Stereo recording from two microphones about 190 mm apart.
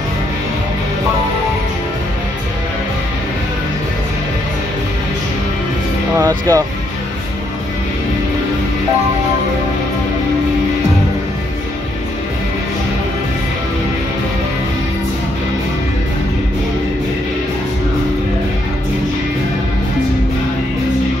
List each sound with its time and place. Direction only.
6.1 s speech: 20° right (ahead or behind)